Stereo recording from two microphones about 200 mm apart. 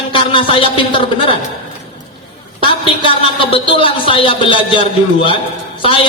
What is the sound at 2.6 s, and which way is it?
A man's voice, 25° left (ahead or behind).